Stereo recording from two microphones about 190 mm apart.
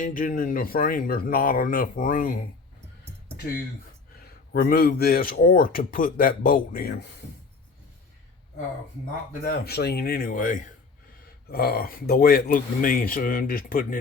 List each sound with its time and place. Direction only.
0.0 s speech: 45° left (ahead or behind)
4.5 s speech: 55° left (ahead or behind)
9.3 s speech: 50° left (ahead or behind)